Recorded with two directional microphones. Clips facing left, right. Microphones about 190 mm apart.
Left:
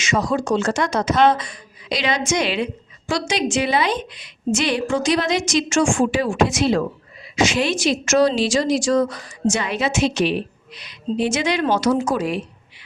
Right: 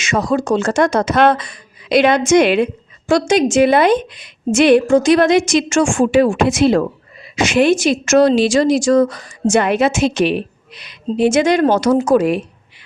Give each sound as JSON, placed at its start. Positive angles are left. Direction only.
{"t": 0.0, "sound": "a woman's voice", "side_deg": -55}